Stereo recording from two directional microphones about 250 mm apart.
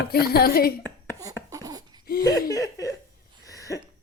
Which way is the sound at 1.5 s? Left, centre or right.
Centre.